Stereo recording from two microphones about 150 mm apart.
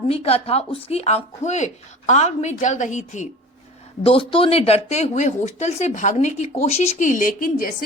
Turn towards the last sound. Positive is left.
turn(degrees=65)  # may be behind; listen again after turning